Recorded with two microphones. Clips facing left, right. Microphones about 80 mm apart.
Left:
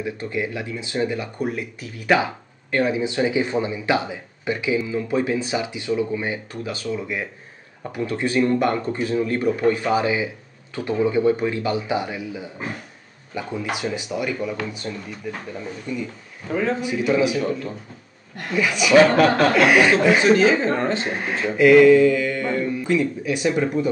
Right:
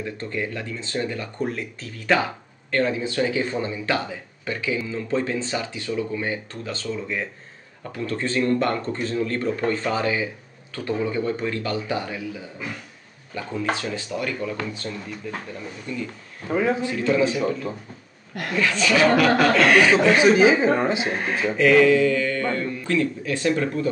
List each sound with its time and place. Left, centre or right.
0.0 s speech: centre
16.4 s speech: centre
16.8 s speech: centre
17.4 s speech: centre
18.5 s speech: centre
20.3 s speech: centre
21.5 s speech: centre